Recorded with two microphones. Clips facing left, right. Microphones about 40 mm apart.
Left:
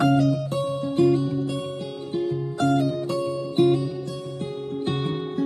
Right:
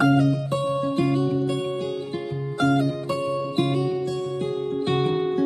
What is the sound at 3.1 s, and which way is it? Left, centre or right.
Music, right.